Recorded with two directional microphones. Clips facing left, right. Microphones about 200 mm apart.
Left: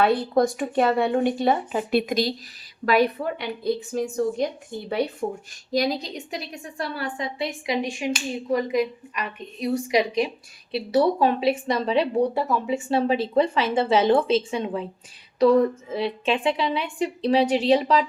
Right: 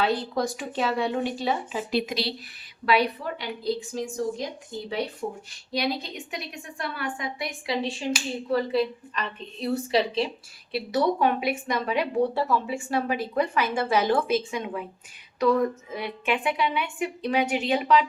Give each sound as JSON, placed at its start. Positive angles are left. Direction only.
{"t": 0.0, "sound": "a woman's voice", "side_deg": 55}
{"t": 12.3, "sound": "a woman's voice", "side_deg": 20}